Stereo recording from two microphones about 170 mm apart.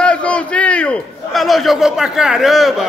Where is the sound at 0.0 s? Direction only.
5° left (ahead or behind).